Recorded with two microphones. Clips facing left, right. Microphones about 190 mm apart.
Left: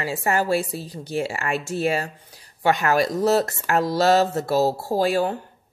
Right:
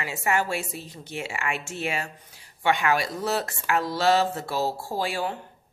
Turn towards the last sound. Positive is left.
turn(degrees=40)  # may be behind; listen again after turning